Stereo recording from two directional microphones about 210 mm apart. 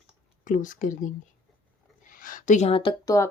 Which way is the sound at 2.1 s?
40° left (ahead or behind).